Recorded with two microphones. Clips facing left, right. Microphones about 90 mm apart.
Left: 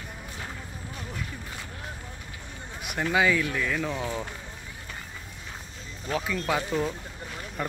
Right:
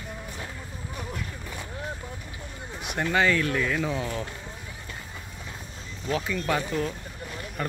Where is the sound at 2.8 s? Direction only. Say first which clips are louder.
Even; 5° left (ahead or behind).